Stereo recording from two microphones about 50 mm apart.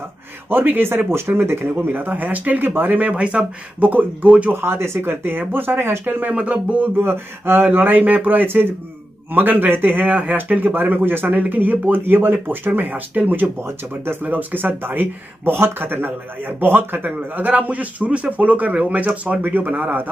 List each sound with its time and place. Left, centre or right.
0.5 s speech: right
3.1 s speech: right
3.8 s speech: right
4.6 s speech: right
6.3 s speech: right
7.0 s speech: right
8.5 s speech: right
13.6 s speech: right
14.2 s speech: right
17.5 s speech: right